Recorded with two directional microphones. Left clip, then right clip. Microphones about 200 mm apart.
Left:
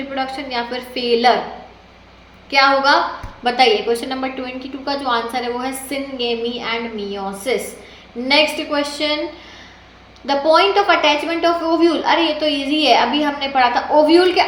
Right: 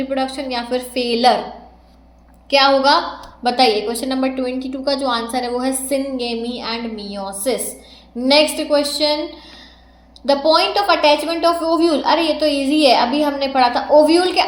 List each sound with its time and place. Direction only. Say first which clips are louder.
0.1 s a woman's voice: left 2 dB; 40° right (ahead or behind)
2.5 s a woman's voice: even; 40° right (ahead or behind)
10.5 s a woman's voice: left 4 dB; 40° right (ahead or behind)